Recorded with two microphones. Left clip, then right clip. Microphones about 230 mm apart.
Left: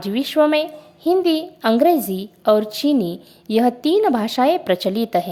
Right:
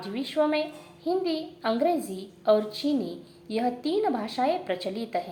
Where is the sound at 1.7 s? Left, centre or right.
Left.